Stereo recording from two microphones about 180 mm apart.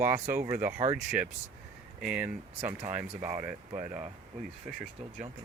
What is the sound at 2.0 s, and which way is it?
Speech, 5° right (ahead or behind).